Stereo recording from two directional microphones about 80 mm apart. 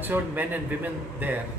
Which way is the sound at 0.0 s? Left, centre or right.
Right.